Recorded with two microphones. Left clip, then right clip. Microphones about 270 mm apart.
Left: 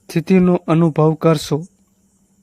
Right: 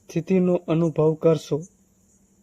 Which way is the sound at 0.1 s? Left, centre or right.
Left.